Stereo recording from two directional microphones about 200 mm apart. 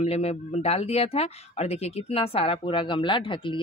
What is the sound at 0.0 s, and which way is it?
Speech, 30° left (ahead or behind).